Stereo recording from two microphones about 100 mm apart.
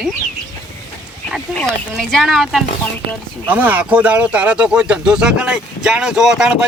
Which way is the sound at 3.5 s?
15° right (ahead or behind).